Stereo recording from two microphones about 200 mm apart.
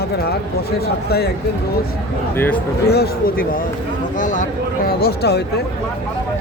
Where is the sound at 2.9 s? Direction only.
50° left (ahead or behind).